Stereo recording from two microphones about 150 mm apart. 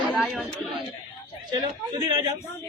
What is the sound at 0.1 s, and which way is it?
Speech, centre (ahead or behind).